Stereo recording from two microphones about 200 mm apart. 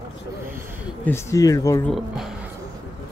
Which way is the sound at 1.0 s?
15° left (ahead or behind).